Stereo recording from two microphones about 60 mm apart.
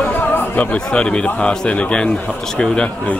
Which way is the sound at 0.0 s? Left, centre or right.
Left.